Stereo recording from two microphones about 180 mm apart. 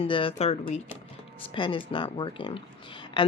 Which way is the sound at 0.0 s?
30° left (ahead or behind).